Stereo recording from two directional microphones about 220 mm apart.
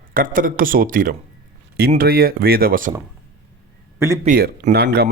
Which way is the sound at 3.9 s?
10° right (ahead or behind).